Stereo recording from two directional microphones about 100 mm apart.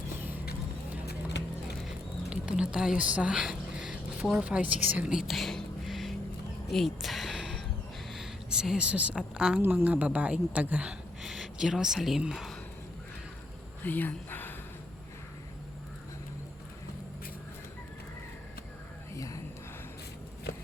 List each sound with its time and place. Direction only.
0.2 s vehicle: 20° right (ahead or behind)
1.8 s a sound: 5° right (ahead or behind)
8.1 s speech: 5° right (ahead or behind)
9.6 s a woman's voice: 20° right (ahead or behind)
11.2 s speech: 5° right (ahead or behind)
13.8 s speech: 20° left (ahead or behind)
19.1 s a sound: 35° left (ahead or behind)